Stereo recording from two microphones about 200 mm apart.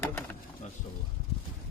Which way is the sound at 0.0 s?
10° left (ahead or behind).